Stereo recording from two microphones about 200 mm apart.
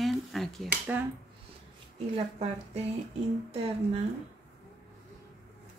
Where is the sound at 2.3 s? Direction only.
30° right (ahead or behind).